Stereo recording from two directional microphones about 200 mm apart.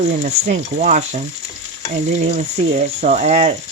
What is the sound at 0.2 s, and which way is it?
Frying, 40° right (ahead or behind).